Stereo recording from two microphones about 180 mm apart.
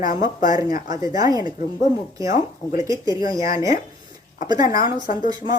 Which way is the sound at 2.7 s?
20° right (ahead or behind).